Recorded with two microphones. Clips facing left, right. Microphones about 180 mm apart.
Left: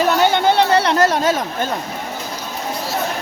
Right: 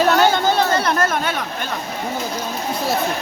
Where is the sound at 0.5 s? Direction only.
70° left (ahead or behind).